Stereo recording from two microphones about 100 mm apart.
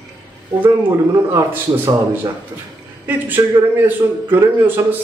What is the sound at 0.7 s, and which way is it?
Speech, 25° right (ahead or behind).